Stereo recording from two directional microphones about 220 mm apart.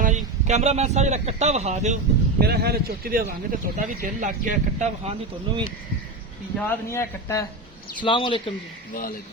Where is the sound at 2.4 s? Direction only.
45° right (ahead or behind).